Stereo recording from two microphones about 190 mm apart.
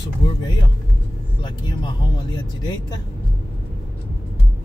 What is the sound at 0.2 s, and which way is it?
Speech, 25° left (ahead or behind).